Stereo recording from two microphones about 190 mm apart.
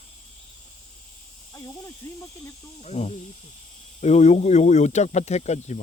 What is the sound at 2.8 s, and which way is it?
Speech, 35° left (ahead or behind).